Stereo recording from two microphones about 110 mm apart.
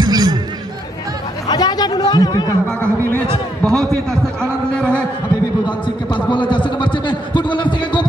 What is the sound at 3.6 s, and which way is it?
A man's voice, 5° left (ahead or behind).